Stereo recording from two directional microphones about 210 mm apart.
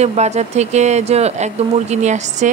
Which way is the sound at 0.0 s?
30° right (ahead or behind).